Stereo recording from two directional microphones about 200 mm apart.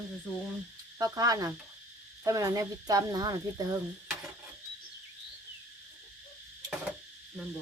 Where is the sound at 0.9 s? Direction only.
20° right (ahead or behind).